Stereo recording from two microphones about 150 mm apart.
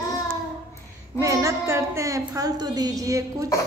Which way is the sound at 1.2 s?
20° right (ahead or behind).